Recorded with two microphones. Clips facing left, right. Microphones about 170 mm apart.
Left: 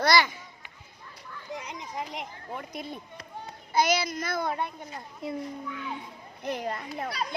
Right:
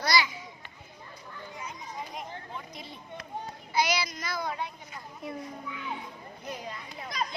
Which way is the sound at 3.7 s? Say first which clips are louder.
Left 4 dB; 50° left (ahead or behind).